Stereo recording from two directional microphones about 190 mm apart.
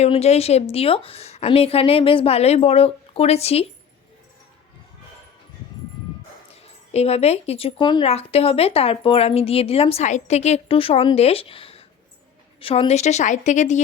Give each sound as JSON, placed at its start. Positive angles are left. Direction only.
{"t": 0.0, "sound": "speech", "side_deg": 35}
{"t": 6.5, "sound": "speech", "side_deg": 35}